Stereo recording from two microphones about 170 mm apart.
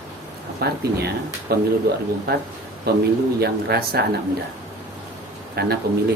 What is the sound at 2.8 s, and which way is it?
Speech, 70° right (ahead or behind).